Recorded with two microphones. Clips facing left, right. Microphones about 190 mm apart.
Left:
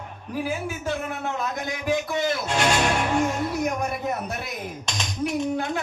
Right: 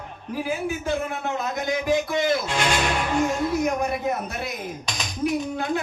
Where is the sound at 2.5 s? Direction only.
45° left (ahead or behind).